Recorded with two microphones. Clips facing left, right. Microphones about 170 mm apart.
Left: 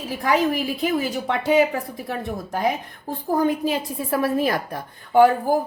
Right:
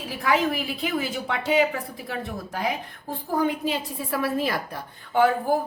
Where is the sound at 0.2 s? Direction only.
40° left (ahead or behind).